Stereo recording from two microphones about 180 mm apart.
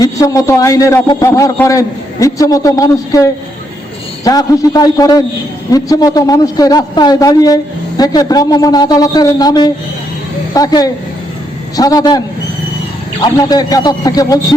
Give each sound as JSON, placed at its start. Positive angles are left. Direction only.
{"t": 0.0, "sound": "a man's voice", "side_deg": 20}
{"t": 13.2, "sound": "a man's voice", "side_deg": 20}